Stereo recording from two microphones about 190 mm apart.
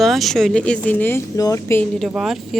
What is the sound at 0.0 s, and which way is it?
Speech, centre (ahead or behind).